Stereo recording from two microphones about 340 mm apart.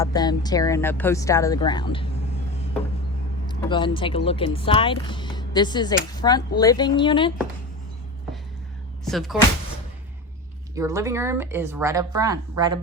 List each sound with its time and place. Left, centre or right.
0.0 s speech: centre
3.4 s speech: centre
9.0 s speech: centre
10.8 s speech: centre